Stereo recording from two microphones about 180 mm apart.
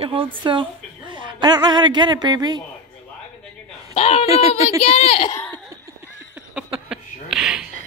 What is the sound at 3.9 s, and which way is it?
A child's voice, 35° left (ahead or behind).